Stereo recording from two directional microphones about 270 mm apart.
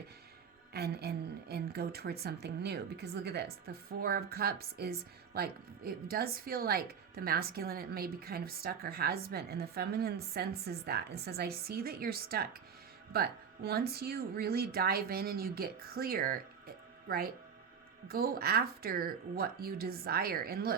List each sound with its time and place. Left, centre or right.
0.7 s a woman's voice: right